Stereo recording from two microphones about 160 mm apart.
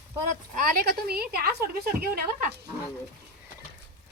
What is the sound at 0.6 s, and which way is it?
A woman's voice, 70° right (ahead or behind).